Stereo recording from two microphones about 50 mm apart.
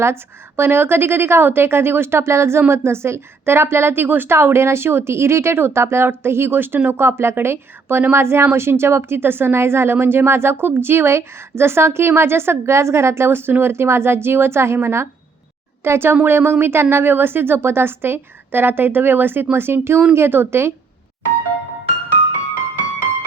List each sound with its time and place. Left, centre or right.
0.0 s a woman's voice: right